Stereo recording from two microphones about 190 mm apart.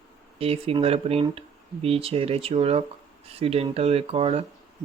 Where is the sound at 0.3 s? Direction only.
30° right (ahead or behind).